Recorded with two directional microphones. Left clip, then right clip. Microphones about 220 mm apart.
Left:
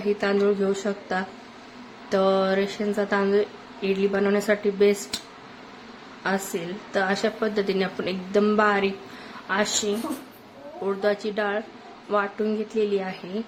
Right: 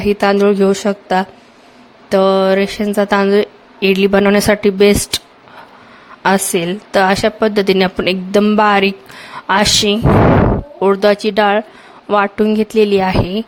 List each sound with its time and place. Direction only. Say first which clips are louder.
0.0 s speech: right 10 dB; 45° right (ahead or behind)
6.2 s speech: right 13 dB; 45° right (ahead or behind)